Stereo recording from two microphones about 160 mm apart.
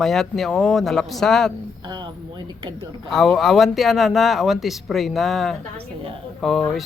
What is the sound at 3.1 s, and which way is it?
Speech, centre (ahead or behind).